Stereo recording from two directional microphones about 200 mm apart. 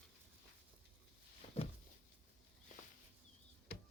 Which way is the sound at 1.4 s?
35° left (ahead or behind).